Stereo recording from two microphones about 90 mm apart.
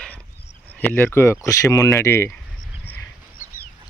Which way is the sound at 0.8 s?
20° left (ahead or behind).